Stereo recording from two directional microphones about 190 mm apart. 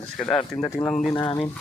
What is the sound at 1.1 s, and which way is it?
Speech, 25° left (ahead or behind).